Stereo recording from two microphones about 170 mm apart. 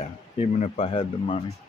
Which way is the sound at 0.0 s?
40° left (ahead or behind).